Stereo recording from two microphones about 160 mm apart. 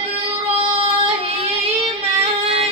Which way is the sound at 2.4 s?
35° right (ahead or behind).